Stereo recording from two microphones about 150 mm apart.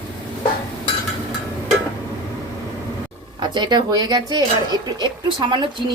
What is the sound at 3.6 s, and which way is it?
Speech, 30° right (ahead or behind).